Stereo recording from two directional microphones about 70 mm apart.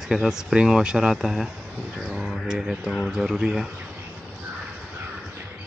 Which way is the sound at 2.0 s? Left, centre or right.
Centre.